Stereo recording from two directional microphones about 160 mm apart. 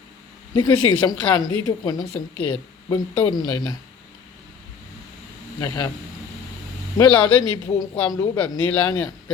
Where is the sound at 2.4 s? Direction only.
10° left (ahead or behind).